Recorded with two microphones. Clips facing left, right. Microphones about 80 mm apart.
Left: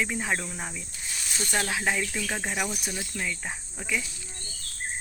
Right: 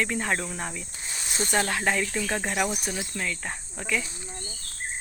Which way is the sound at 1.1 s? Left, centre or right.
Right.